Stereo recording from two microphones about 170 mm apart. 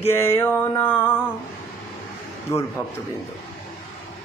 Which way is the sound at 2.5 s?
20° left (ahead or behind).